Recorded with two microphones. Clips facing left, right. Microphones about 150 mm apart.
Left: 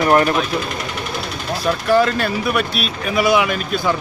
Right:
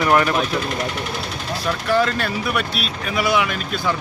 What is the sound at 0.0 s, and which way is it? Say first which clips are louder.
Speech: left 3 dB; 35° left (ahead or behind).